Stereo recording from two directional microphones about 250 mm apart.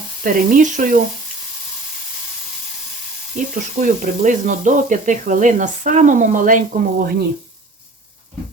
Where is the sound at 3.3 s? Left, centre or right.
Right.